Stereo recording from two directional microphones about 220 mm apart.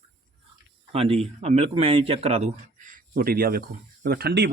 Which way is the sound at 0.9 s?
25° right (ahead or behind).